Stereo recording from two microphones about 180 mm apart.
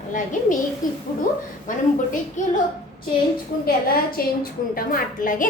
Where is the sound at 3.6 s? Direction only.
55° left (ahead or behind).